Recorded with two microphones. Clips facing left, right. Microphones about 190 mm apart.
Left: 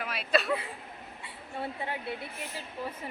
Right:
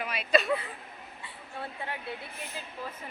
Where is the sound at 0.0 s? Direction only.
Centre (ahead or behind).